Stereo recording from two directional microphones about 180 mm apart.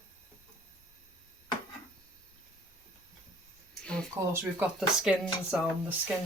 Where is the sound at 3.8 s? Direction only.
5° left (ahead or behind).